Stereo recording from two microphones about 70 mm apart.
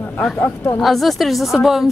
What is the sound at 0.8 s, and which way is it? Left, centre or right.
A man's voice, centre.